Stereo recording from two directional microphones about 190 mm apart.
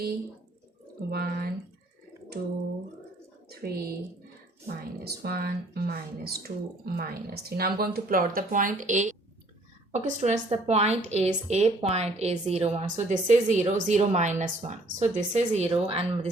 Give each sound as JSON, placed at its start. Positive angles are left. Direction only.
{"t": 1.1, "sound": "speech", "side_deg": -55}
{"t": 3.5, "sound": "a woman's voice", "side_deg": -55}